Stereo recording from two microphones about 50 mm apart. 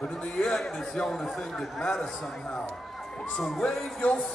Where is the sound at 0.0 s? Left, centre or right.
Centre.